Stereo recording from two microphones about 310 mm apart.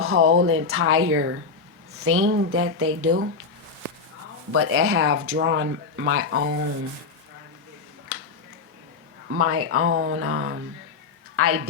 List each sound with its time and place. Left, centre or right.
0.0 s a woman's voice: right
4.5 s speech: right
8.1 s a sound: right
9.3 s a woman's voice: right